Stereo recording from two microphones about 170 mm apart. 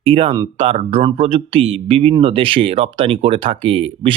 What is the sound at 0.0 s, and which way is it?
Speech, 35° right (ahead or behind).